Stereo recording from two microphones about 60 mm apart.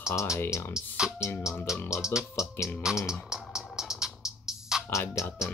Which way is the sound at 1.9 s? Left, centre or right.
Left.